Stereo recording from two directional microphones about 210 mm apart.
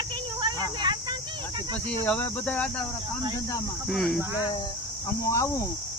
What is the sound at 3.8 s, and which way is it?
Speech, centre (ahead or behind).